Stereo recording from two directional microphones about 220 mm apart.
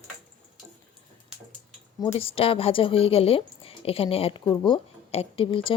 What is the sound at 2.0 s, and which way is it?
Speech, 25° left (ahead or behind).